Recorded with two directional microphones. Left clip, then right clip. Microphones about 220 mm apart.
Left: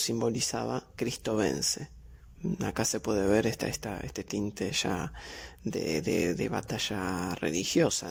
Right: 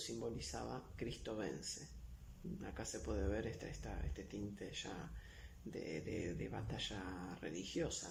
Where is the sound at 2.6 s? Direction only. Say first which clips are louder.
Left 17 dB; 50° left (ahead or behind).